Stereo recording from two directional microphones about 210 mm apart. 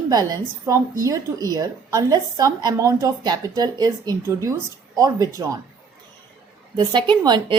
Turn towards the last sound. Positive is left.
turn(degrees=-20)  # may be behind; listen again after turning